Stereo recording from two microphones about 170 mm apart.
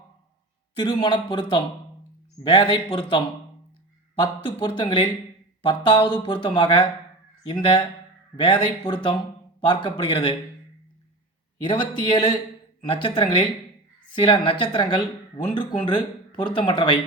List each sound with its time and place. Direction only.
0.8 s speech: 25° left (ahead or behind)
11.6 s speech: 25° left (ahead or behind)